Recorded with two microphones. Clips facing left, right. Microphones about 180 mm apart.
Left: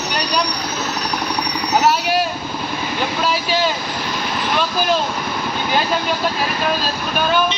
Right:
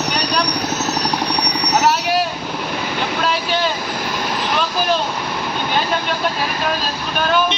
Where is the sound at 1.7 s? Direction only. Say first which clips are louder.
Left 1 dB; centre (ahead or behind).